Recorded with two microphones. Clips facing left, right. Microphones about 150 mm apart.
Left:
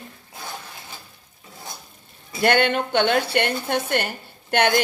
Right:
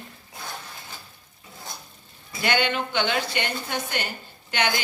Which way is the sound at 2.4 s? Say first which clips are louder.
Left 5 dB; 55° left (ahead or behind).